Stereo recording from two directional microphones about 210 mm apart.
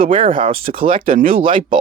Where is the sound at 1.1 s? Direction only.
40° right (ahead or behind).